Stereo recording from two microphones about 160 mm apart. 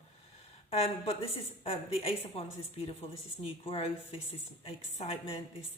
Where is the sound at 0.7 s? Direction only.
40° left (ahead or behind).